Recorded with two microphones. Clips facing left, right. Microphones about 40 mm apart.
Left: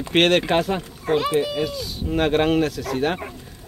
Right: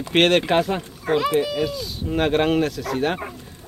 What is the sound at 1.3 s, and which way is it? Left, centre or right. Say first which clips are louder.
Speech: right 1 dB; left.